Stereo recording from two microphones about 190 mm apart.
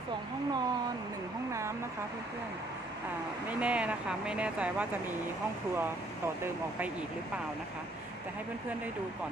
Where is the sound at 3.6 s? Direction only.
5° right (ahead or behind).